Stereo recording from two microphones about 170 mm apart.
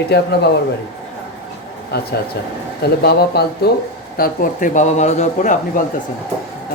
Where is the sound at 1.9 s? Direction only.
70° left (ahead or behind).